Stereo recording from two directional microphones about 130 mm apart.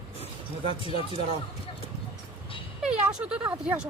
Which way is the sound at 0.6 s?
45° left (ahead or behind).